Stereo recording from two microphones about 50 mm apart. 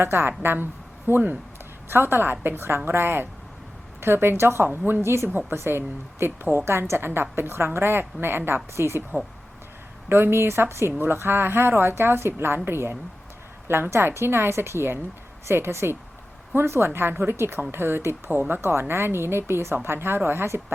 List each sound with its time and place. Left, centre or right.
0.0 s a woman's voice: right
5.0 s a woman's voice: right
10.1 s a woman's voice: right